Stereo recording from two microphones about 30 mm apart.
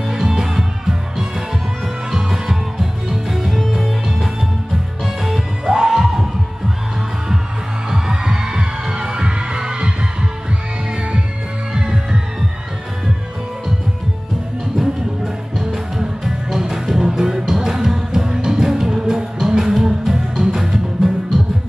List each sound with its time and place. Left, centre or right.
0.0 s music: right; by 3.9 s centre
5.0 s music: centre
7.9 s heart sounds: right
11.7 s music: right
15.5 s music: centre